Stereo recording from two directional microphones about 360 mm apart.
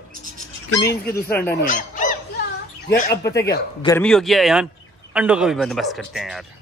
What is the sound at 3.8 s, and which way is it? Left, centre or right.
Speech, centre.